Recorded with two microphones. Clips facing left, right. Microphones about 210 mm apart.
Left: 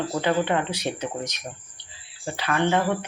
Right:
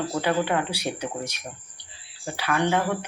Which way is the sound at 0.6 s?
10° right (ahead or behind).